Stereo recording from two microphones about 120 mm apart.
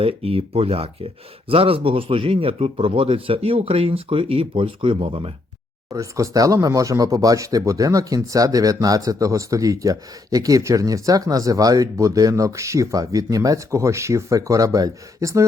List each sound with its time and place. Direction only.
0.0 s speech: 55° right (ahead or behind)
5.9 s speech: 30° right (ahead or behind)